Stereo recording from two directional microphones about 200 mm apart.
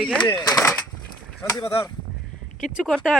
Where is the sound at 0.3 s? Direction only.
20° left (ahead or behind).